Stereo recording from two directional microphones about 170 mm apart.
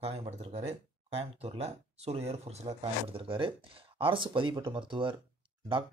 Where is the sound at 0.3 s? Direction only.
35° right (ahead or behind).